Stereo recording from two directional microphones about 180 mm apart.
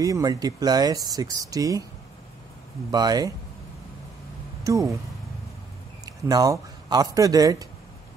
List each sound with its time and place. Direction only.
0.0 s speech: 20° right (ahead or behind)
2.9 s speech: 20° right (ahead or behind)
4.7 s speech: 20° right (ahead or behind)
6.0 s speech: 20° right (ahead or behind)